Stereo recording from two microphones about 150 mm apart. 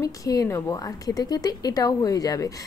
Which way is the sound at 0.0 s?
20° left (ahead or behind).